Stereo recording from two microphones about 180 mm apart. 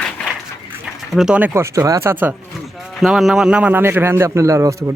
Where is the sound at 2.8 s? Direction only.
Centre (ahead or behind); by 4.9 s 15° right (ahead or behind).